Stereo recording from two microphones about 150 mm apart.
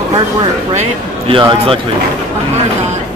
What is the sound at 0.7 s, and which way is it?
Speech, 35° right (ahead or behind).